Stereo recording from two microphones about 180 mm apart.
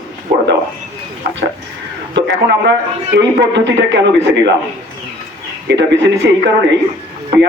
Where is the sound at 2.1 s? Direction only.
75° right (ahead or behind).